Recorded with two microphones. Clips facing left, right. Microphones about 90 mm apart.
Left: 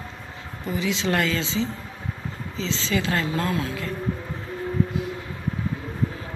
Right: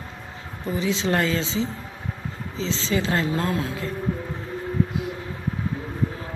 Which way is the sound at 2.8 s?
25° right (ahead or behind).